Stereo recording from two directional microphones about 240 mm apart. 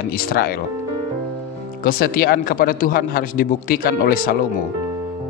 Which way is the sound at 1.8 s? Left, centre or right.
Left.